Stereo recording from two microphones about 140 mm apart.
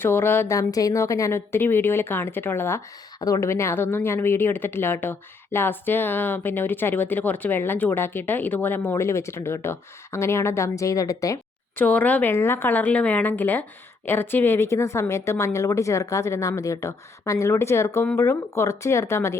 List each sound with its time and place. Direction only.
0.0 s speech: 15° left (ahead or behind)
11.8 s speech: 10° left (ahead or behind)